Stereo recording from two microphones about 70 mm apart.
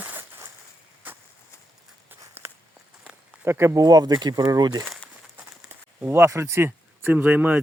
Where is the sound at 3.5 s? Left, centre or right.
Right.